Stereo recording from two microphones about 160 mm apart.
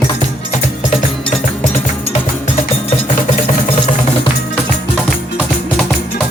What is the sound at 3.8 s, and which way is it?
Music, 40° left (ahead or behind).